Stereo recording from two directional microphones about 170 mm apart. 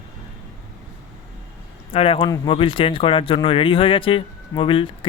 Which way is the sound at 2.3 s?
20° left (ahead or behind).